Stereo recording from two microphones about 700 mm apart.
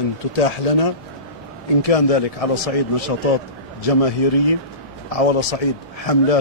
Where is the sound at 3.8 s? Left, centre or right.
Left.